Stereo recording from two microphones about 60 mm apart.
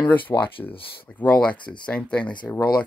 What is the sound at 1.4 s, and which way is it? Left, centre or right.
Speech, centre.